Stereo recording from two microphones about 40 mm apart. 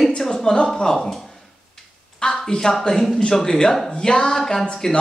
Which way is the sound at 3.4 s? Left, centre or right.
Centre.